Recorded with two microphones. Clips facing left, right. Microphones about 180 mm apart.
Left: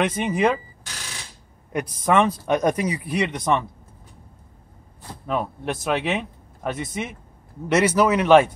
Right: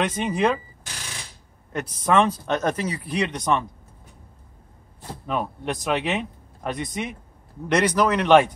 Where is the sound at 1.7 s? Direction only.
10° left (ahead or behind).